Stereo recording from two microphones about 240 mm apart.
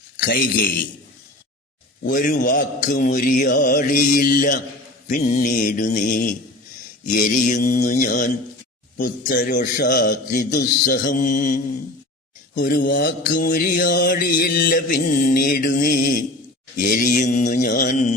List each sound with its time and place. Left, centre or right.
2.0 s mantra: left